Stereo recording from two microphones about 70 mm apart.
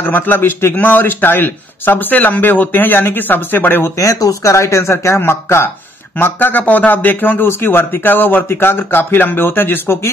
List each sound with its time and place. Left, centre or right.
0.0 s a man's voice: left
4.0 s a man's voice: left